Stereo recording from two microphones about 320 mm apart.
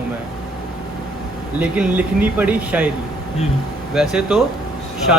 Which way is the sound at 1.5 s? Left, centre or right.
Centre.